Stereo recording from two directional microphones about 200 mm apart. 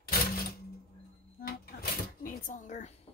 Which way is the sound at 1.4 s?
50° left (ahead or behind).